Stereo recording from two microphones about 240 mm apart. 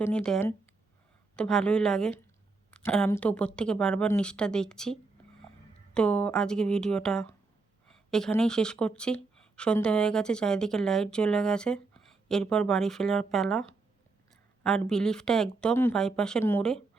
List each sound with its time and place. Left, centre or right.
0.0 s a woman's voice: centre